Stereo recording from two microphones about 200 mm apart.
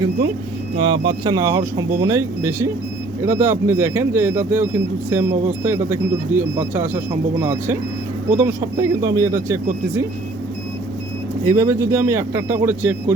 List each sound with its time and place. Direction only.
0.8 s speech: 25° right (ahead or behind)
11.4 s speech: 15° right (ahead or behind)